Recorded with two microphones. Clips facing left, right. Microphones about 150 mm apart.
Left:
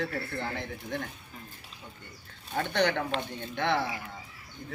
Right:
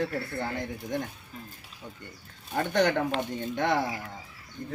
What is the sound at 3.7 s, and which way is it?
Speech, 45° right (ahead or behind).